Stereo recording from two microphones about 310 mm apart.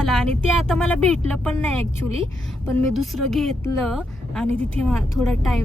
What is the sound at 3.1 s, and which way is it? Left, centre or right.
Speech, centre.